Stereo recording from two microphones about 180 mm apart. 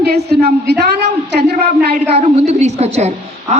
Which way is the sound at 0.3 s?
65° right (ahead or behind).